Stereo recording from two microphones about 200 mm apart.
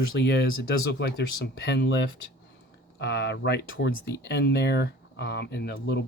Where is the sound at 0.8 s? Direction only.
65° left (ahead or behind).